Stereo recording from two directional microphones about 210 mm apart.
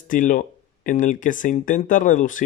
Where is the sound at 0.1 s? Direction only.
40° left (ahead or behind).